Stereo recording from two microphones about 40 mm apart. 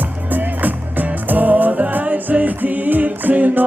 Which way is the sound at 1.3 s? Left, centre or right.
Right.